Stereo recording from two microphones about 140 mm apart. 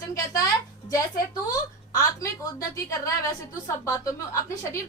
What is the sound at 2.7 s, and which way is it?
A woman's voice, 20° left (ahead or behind).